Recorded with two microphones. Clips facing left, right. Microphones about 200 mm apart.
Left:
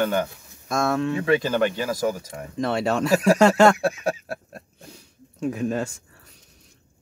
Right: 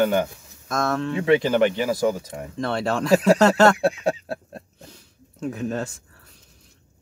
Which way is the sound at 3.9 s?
25° right (ahead or behind).